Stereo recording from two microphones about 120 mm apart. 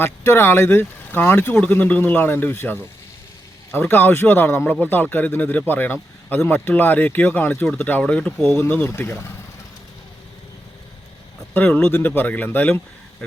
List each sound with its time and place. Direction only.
0.0 s speech: 20° left (ahead or behind)
11.5 s speech: 15° left (ahead or behind)